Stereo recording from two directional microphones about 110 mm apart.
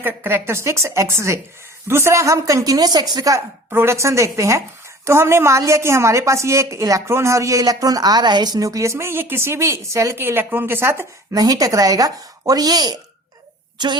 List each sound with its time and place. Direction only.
0.0 s a woman's voice: 20° right (ahead or behind)
3.7 s a woman's voice: 20° right (ahead or behind); by 13.0 s 35° right (ahead or behind)